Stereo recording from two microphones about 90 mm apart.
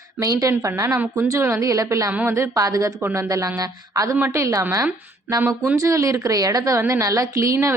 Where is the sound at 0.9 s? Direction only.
20° right (ahead or behind).